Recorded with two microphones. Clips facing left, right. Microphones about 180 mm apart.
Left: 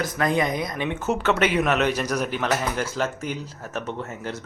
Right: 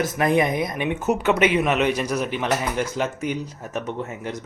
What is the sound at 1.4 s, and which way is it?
A man's voice, centre (ahead or behind).